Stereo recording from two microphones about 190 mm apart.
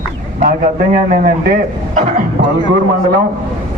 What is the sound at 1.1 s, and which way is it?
Speech, 45° right (ahead or behind).